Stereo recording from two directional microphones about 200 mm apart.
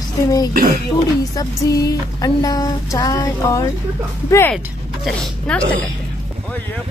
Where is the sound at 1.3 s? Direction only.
15° left (ahead or behind).